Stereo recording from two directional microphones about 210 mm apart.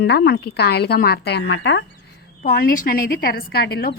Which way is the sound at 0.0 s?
50° left (ahead or behind).